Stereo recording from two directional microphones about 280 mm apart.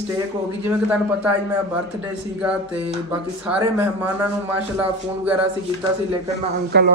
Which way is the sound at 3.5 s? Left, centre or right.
Centre.